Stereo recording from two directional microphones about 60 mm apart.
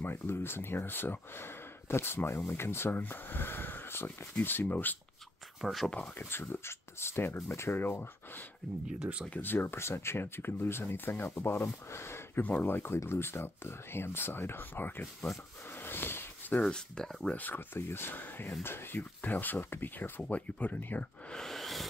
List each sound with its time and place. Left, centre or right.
0.0 s speech: left
5.6 s speech: centre
5.9 s speech: left
8.8 s speech: centre
9.4 s speech: left
12.4 s speech: left
12.6 s speech: left
15.7 s a sound: left
16.6 s speech: centre
17.3 s speech: left
21.3 s a sound: centre